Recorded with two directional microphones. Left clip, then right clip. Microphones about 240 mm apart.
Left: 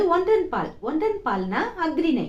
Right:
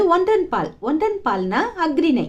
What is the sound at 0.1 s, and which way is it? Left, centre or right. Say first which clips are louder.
A woman's voice: right 4 dB; right.